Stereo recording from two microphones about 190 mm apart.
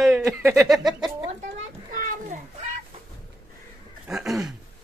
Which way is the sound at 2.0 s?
45° right (ahead or behind).